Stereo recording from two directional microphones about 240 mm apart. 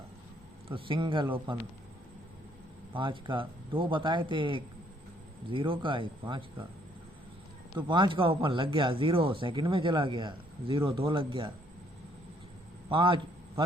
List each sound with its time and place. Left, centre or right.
0.7 s speech: centre
2.9 s speech: centre
7.8 s speech: centre
12.9 s speech: centre